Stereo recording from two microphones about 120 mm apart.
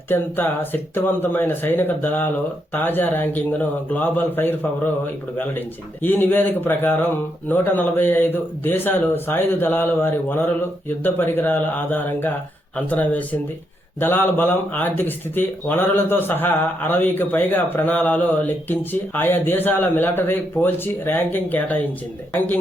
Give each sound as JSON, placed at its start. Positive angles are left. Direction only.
{"t": 0.1, "sound": "speech", "side_deg": 15}